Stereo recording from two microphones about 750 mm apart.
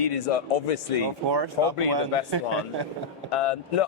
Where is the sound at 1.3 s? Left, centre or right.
Right.